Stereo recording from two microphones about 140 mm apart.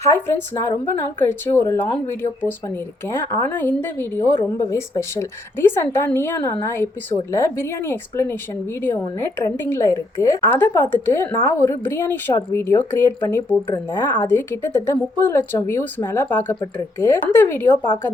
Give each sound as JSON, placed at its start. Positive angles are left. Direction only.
{"t": 0.9, "sound": "a woman's voice", "side_deg": 15}